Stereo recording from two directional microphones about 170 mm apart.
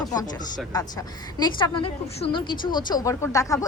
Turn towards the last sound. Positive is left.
turn(degrees=20)  # may be behind; listen again after turning